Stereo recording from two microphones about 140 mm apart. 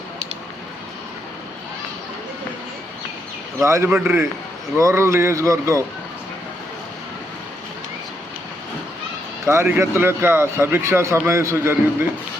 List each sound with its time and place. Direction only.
3.6 s speech: 20° right (ahead or behind)
9.5 s a man's voice: 20° right (ahead or behind)